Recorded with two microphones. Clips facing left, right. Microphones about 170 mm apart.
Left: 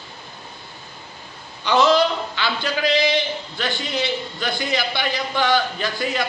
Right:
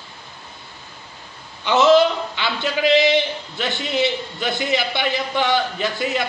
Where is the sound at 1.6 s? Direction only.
25° right (ahead or behind).